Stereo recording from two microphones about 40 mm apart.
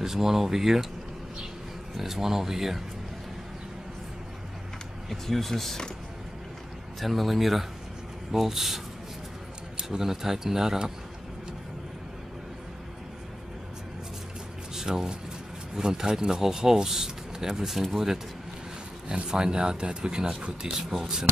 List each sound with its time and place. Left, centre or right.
0.0 s speech: centre
2.0 s speech: centre
5.1 s speech: centre
7.0 s speech: centre
9.8 s speech: centre
14.8 s speech: centre